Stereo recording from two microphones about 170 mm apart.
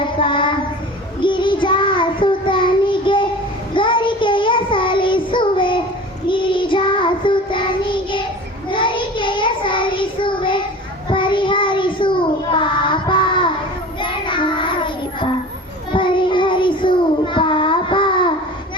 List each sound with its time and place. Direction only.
0.2 s child singing: 30° left (ahead or behind)
15.9 s child singing: 30° left (ahead or behind)